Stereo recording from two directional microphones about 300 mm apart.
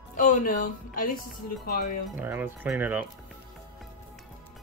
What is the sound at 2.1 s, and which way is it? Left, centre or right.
Speech, centre.